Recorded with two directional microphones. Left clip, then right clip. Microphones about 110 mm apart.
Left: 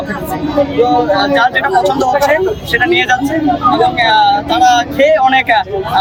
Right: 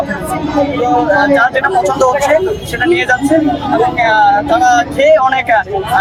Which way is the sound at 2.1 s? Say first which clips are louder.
Even; 10° right (ahead or behind).